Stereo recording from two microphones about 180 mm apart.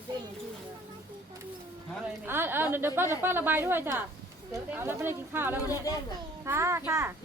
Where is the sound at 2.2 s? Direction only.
10° right (ahead or behind).